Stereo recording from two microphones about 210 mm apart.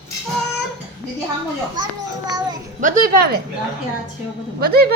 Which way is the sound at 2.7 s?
40° right (ahead or behind).